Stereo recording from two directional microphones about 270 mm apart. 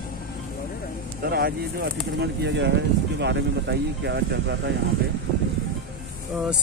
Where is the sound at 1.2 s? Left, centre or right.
Right.